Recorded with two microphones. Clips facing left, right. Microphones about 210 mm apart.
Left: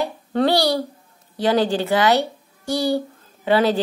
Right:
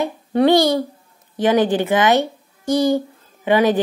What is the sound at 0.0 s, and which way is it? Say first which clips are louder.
A child's voice: right 4 dB; 15° right (ahead or behind).